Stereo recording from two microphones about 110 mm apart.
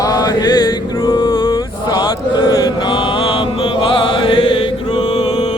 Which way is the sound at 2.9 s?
55° left (ahead or behind).